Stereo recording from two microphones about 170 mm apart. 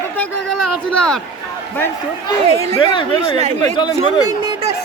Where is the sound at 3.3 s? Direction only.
40° right (ahead or behind).